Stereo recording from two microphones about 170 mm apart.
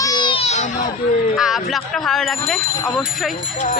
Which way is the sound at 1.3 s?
Centre (ahead or behind).